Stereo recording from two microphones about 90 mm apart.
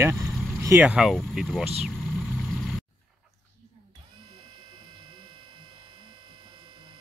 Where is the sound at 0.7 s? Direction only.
15° right (ahead or behind).